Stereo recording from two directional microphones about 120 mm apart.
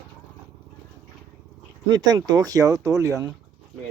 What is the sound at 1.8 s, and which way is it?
Speech, 35° right (ahead or behind).